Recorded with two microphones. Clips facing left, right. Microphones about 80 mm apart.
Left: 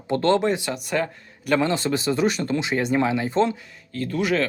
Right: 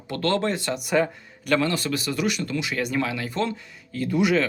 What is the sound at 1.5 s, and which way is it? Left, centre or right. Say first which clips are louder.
Speech: left 2 dB; left.